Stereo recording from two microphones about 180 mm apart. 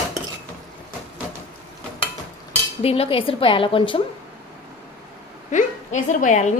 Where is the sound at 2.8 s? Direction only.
35° left (ahead or behind).